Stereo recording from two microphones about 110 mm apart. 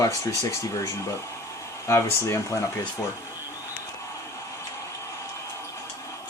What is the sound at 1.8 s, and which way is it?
Speech, 25° left (ahead or behind).